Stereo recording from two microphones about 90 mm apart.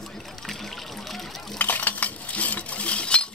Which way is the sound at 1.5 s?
20° left (ahead or behind).